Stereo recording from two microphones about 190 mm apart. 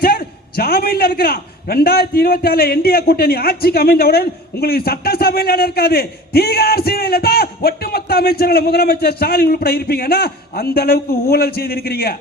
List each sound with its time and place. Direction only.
0.0 s a man's voice: 55° left (ahead or behind)